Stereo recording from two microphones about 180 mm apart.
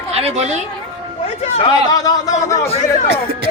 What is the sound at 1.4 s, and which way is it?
Speech, 35° left (ahead or behind).